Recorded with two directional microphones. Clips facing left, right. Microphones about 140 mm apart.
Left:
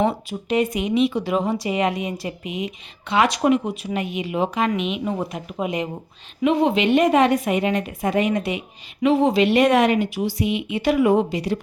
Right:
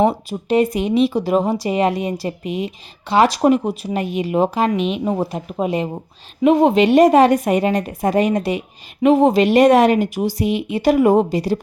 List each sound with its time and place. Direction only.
0.1 s a woman's voice: 35° right (ahead or behind)
6.4 s a woman's voice: 45° right (ahead or behind)